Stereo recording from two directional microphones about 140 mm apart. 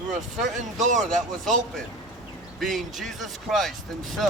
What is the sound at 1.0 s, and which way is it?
Speech, 60° right (ahead or behind).